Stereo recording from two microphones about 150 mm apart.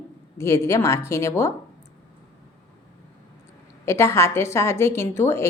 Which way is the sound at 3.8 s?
20° left (ahead or behind).